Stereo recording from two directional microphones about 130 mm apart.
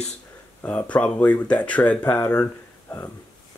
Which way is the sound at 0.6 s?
10° left (ahead or behind).